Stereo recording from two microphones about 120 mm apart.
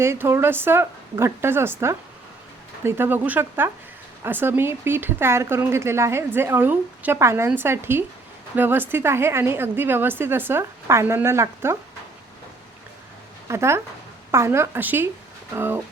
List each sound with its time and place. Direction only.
0.0 s speech: 20° right (ahead or behind)
13.5 s speech: 20° right (ahead or behind)